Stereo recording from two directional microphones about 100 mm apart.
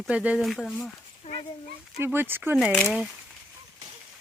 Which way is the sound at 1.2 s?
65° left (ahead or behind).